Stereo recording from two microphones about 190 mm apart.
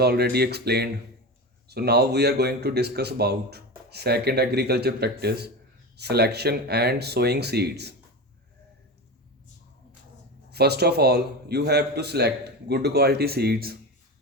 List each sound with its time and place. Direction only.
0.0 s speech: 55° right (ahead or behind)
10.5 s speech: 60° right (ahead or behind)